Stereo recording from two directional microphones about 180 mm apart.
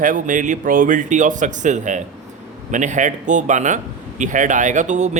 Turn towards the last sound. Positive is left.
turn(degrees=-40)  # may be behind; listen again after turning